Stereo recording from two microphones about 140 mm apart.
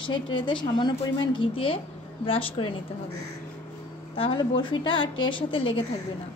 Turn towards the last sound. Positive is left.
turn(degrees=40)  # may be behind; listen again after turning